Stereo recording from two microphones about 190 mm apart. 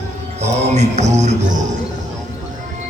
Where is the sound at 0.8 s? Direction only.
35° right (ahead or behind).